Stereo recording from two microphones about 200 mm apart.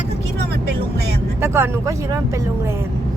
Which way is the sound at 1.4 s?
10° right (ahead or behind).